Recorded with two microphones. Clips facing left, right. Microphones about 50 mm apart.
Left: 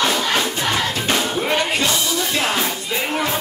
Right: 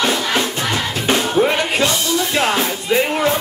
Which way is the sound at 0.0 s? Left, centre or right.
Centre.